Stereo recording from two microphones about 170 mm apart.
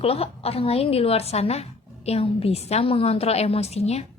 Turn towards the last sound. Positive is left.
turn(degrees=40)  # may be behind; listen again after turning